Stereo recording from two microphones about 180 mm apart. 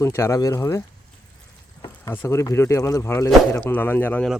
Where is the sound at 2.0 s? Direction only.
15° left (ahead or behind).